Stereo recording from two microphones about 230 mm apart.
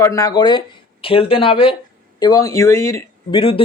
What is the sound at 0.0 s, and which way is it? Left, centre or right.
Speech, centre.